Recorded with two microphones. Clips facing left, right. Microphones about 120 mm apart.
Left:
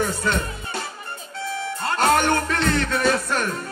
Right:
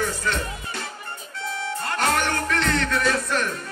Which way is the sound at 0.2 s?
30° left (ahead or behind).